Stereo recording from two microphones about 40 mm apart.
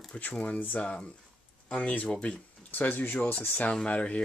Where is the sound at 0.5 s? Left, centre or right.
Left.